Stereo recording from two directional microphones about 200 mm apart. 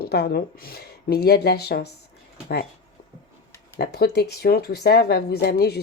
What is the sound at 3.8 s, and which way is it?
Speech, 55° left (ahead or behind).